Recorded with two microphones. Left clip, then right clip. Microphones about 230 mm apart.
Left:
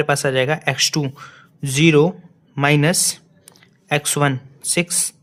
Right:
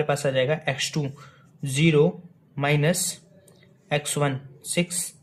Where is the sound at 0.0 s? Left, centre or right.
Left.